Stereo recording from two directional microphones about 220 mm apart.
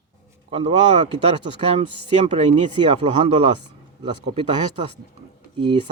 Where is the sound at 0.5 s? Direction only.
25° right (ahead or behind).